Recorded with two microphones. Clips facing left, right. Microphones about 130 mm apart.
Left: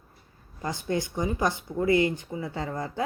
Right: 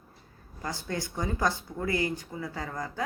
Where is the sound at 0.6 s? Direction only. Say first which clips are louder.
Left 5 dB; 20° left (ahead or behind).